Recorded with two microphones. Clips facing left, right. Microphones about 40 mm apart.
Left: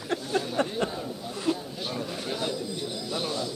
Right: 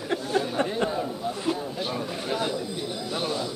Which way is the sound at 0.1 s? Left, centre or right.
Centre.